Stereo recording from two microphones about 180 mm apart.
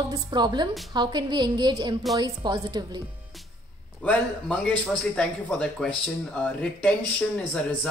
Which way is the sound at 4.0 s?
5° left (ahead or behind).